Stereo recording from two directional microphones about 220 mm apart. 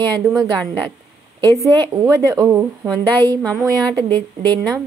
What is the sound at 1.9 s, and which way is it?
Speech, 15° right (ahead or behind).